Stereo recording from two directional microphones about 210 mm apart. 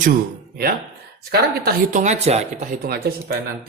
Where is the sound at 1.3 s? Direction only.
45° right (ahead or behind).